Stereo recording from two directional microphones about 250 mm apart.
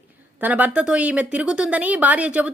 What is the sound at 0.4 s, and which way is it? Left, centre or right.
A woman's voice, centre.